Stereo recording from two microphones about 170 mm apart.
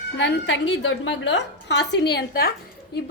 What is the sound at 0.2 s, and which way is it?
A woman's voice, 90° left.